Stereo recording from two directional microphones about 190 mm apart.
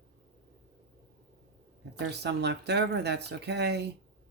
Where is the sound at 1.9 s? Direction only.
60° right (ahead or behind).